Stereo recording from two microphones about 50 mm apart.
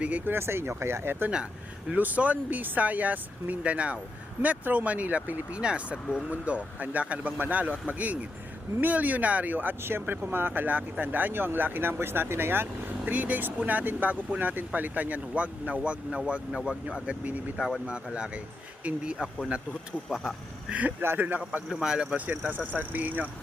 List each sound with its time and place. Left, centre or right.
0.3 s speech: right
2.0 s speech: right; by 6.3 s centre
6.3 s speech: right
9.8 s speech: right
13.1 s speech: right
20.1 s speech: centre
20.7 s speech: right
21.8 s speech: centre
22.3 s speech: right